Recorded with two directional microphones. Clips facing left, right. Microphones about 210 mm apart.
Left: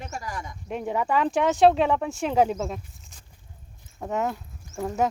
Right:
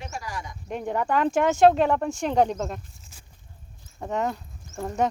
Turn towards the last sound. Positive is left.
turn(degrees=0)  # may be behind; listen again after turning